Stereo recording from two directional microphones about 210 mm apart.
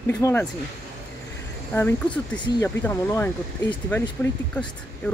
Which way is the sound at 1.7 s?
10° left (ahead or behind).